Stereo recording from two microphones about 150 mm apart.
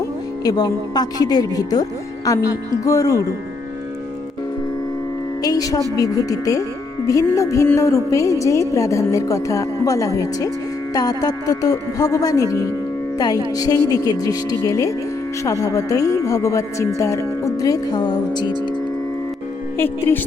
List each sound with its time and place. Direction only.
0.4 s a woman's voice: 25° left (ahead or behind)
5.4 s a woman's voice: 25° left (ahead or behind)
19.7 s a woman's voice: 15° left (ahead or behind)